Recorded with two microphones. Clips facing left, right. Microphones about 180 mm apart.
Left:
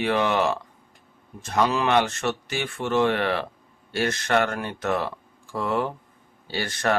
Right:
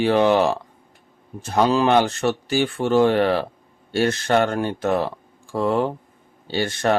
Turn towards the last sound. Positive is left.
turn(degrees=-25)  # may be behind; listen again after turning